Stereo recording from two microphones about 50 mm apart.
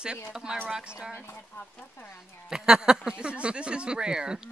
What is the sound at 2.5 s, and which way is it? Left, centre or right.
Speech, centre.